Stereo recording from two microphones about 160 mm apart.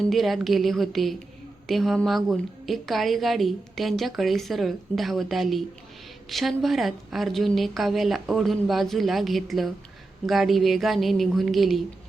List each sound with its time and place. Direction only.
0.1 s a woman's voice: centre (ahead or behind)